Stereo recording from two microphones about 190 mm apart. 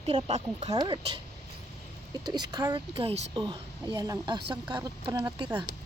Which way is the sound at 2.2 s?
20° right (ahead or behind).